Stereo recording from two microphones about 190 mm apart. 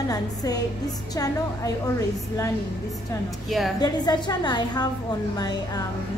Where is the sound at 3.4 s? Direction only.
Centre (ahead or behind).